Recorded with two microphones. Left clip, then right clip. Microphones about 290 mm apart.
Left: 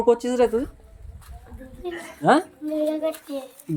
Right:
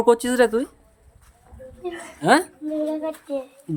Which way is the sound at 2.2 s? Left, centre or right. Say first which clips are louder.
Right 1 dB; centre.